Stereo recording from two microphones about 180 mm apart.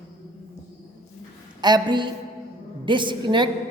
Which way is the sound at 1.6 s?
25° right (ahead or behind).